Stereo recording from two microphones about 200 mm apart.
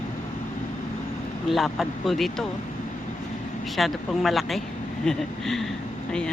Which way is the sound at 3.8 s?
Centre (ahead or behind).